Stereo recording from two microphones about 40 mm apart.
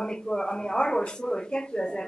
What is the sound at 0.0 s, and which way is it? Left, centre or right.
A woman's voice, centre.